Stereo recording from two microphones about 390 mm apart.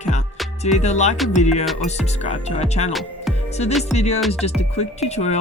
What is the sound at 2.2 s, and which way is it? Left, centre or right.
Speech, centre.